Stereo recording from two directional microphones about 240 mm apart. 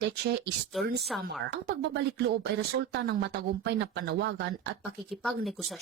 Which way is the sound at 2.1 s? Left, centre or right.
Right.